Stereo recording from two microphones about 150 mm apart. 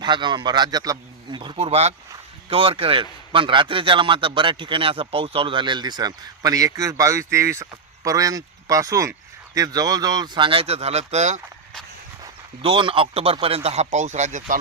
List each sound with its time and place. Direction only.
0.0 s a man's voice: 30° right (ahead or behind); by 11.3 s 50° right (ahead or behind)
12.2 s a man's voice: 35° right (ahead or behind); by 14.6 s 55° right (ahead or behind)